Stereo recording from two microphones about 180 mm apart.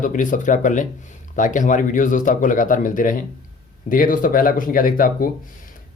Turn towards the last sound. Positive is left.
turn(degrees=50)  # may be behind; listen again after turning